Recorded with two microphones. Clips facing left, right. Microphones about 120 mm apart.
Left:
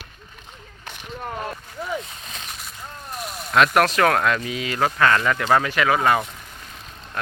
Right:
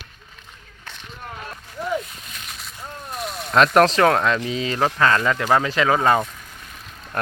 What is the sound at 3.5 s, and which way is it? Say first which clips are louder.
Speech: right 2 dB; 35° right (ahead or behind).